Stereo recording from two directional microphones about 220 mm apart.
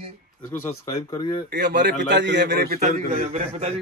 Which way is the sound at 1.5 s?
50° right (ahead or behind).